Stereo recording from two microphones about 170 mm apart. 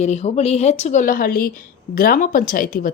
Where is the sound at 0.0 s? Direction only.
40° left (ahead or behind).